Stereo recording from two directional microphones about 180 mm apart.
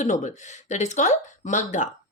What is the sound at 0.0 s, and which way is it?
Speech, 40° left (ahead or behind).